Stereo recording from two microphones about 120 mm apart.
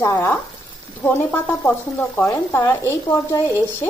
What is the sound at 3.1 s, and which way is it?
Speech, 25° left (ahead or behind).